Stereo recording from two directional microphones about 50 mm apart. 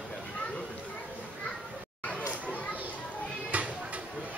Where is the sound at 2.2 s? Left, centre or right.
Right.